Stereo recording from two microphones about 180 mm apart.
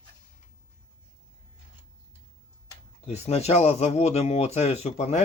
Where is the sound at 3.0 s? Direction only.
35° left (ahead or behind).